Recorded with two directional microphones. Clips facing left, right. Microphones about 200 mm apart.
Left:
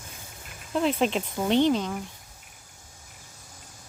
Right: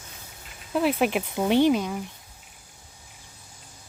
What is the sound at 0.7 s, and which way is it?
Speech, 5° right (ahead or behind).